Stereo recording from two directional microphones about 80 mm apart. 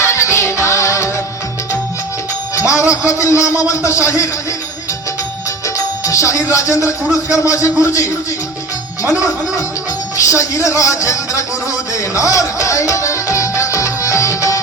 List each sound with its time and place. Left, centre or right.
0.0 s music: left
2.6 s speech: left
5.6 s music: left
10.2 s speech: left
12.1 s music: left